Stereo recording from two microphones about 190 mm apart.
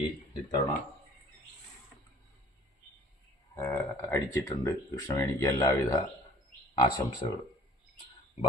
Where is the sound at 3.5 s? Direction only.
15° left (ahead or behind).